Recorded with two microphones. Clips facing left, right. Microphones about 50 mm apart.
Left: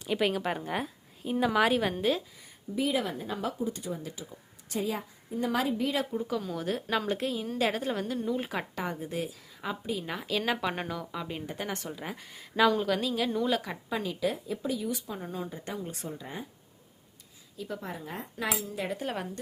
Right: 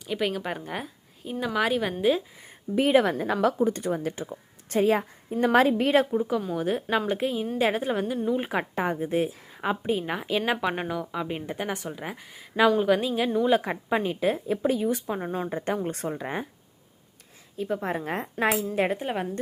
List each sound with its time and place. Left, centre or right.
0.1 s a woman's voice: centre
2.4 s a woman's voice: right
6.1 s a woman's voice: right
10.1 s a woman's voice: right
13.6 s speech: right
17.6 s speech: right
18.6 s speech: right
18.9 s a woman's voice: right